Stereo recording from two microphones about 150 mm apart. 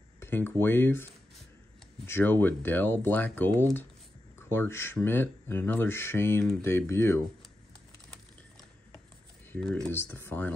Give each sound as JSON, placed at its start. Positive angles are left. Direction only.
{"t": 0.2, "sound": "a sound", "side_deg": 15}
{"t": 0.6, "sound": "speech", "side_deg": 15}
{"t": 2.0, "sound": "speech", "side_deg": 15}
{"t": 9.5, "sound": "speech", "side_deg": 5}